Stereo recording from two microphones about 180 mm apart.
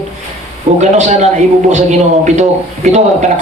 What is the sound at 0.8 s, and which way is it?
A man's voice, 40° right (ahead or behind).